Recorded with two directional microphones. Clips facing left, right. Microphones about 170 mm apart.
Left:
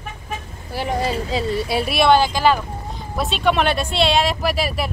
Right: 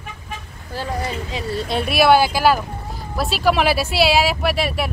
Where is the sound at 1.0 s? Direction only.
30° left (ahead or behind).